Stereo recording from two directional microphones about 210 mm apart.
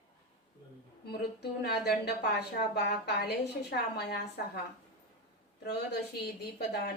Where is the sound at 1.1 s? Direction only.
50° left (ahead or behind).